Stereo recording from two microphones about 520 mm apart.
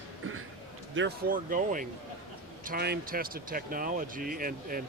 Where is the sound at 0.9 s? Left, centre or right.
Centre.